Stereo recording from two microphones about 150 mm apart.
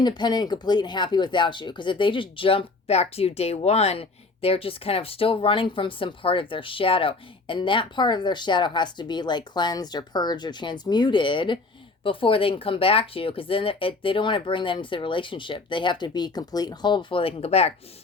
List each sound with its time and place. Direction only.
0.0 s speech: 30° left (ahead or behind)